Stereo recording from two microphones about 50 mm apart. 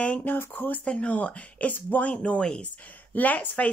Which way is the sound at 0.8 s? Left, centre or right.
Left.